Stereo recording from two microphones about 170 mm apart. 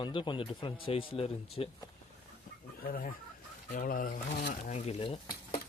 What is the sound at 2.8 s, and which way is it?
Speech, 55° left (ahead or behind).